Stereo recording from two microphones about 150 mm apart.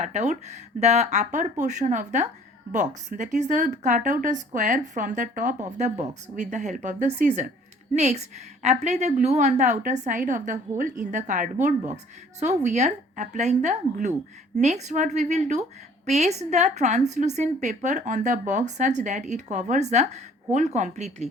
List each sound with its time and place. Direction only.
0.0 s a woman's voice: 50° right (ahead or behind)